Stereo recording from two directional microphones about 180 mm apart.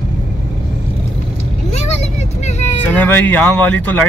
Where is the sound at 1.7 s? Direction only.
35° left (ahead or behind).